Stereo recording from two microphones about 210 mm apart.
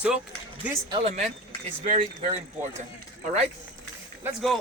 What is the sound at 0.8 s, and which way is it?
Speech, 20° right (ahead or behind).